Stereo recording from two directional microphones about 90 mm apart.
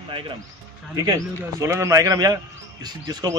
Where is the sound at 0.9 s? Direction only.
50° right (ahead or behind).